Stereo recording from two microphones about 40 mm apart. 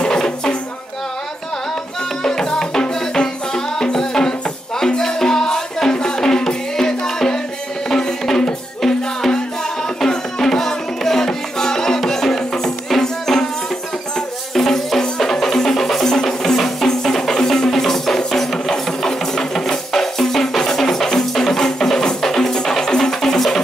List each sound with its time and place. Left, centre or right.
0.0 s music: centre
2.2 s music: centre
14.5 s music: centre
18.7 s music: centre